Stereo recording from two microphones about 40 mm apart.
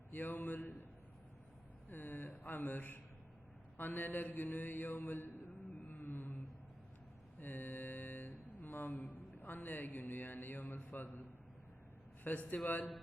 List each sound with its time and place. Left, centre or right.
0.1 s speech: left
1.9 s speech: left
5.9 s a sound: left
9.1 s speech: left
12.2 s speech: left